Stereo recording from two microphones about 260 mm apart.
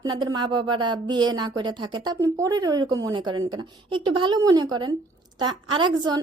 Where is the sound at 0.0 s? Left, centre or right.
Centre.